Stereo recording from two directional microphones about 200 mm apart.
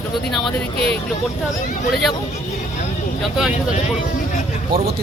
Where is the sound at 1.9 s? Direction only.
Centre (ahead or behind).